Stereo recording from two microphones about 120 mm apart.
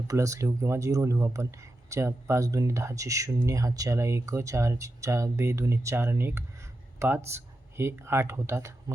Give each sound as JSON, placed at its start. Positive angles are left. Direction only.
{"t": 0.1, "sound": "speech", "side_deg": -25}